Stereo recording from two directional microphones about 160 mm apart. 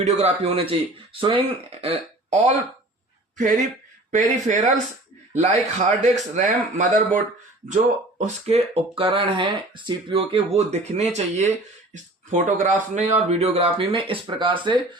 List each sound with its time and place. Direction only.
0.0 s a man's voice: 40° right (ahead or behind)
8.2 s speech: 40° right (ahead or behind)